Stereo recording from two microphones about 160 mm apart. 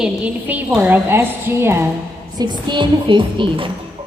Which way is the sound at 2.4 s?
30° right (ahead or behind).